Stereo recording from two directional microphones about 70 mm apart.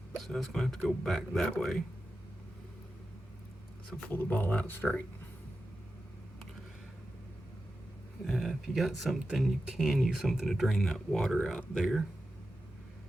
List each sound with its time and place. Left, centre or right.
0.2 s speech: centre
4.1 s speech: left
8.2 s speech: centre